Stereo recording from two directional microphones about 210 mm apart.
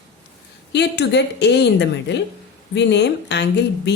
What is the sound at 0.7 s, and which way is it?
A woman's voice, 55° left (ahead or behind).